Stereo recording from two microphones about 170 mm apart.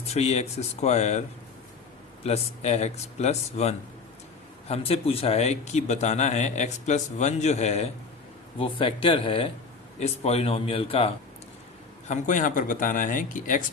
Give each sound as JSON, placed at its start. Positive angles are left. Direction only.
{"t": 0.1, "sound": "a man's voice", "side_deg": 40}
{"t": 2.2, "sound": "a man's voice", "side_deg": 40}
{"t": 12.0, "sound": "speech", "side_deg": 45}